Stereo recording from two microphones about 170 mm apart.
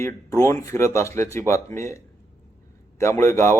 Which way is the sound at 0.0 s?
15° left (ahead or behind).